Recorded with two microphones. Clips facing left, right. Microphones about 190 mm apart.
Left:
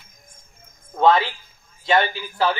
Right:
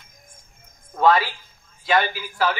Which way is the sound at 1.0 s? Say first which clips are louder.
Left 1 dB; 20° left (ahead or behind).